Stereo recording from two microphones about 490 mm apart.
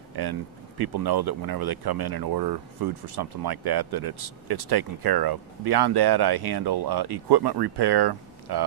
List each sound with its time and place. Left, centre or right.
0.1 s speech: right